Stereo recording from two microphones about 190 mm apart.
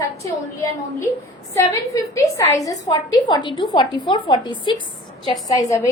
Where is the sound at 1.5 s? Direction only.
15° left (ahead or behind).